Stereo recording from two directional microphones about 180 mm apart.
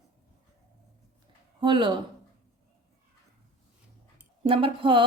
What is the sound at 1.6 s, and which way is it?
Speech, 25° right (ahead or behind).